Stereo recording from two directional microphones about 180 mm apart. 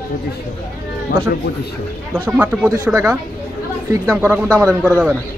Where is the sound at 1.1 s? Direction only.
55° left (ahead or behind).